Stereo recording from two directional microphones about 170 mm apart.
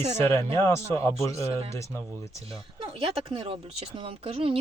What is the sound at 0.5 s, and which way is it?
Speech, 15° left (ahead or behind).